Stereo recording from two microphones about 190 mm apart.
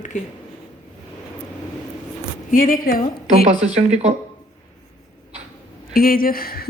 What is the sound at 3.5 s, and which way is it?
Speech, 35° right (ahead or behind).